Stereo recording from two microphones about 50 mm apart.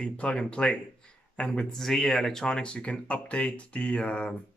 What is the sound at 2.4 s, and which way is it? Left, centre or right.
Speech, centre.